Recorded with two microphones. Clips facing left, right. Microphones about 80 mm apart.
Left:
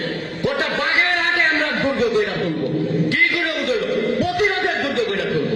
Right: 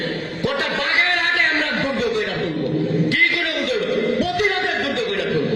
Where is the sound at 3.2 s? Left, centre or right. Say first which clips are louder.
Even; centre.